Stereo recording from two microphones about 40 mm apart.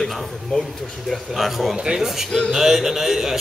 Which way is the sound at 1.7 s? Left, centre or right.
Centre.